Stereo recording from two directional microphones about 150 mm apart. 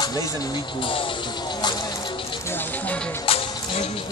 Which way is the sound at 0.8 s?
35° left (ahead or behind).